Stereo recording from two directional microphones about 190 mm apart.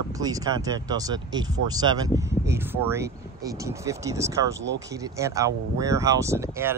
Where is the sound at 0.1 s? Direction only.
20° right (ahead or behind).